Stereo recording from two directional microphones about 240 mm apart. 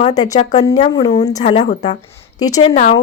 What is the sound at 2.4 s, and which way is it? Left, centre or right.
Speech, centre.